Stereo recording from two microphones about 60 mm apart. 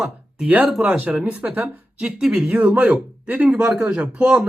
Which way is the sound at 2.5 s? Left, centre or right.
Right.